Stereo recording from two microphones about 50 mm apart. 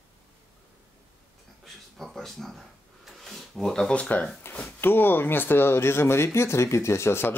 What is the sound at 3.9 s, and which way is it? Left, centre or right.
Speech, left.